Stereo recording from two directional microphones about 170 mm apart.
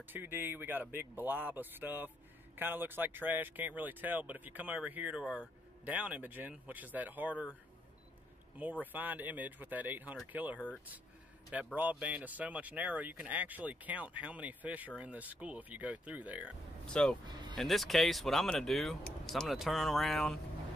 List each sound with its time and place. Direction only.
0.0 s speech: 10° right (ahead or behind)
8.9 s speech: 10° right (ahead or behind)
16.8 s speech: 5° left (ahead or behind)
17.3 s music: 25° right (ahead or behind)
17.6 s speech: centre (ahead or behind)